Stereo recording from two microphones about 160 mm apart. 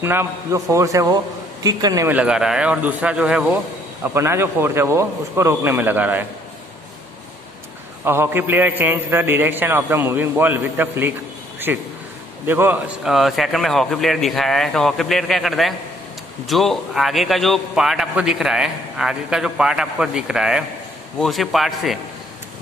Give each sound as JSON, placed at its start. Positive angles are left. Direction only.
{"t": 0.0, "sound": "a man's voice", "side_deg": -15}
{"t": 2.1, "sound": "a man's voice", "side_deg": -5}
{"t": 8.0, "sound": "a man's voice", "side_deg": -15}